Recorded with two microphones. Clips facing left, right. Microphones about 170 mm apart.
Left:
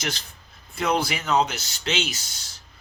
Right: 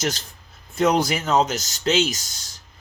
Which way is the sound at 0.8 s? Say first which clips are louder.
Right 5 dB; 45° right (ahead or behind).